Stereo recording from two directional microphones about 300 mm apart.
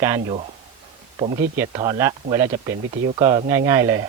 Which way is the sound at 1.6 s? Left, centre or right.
Centre.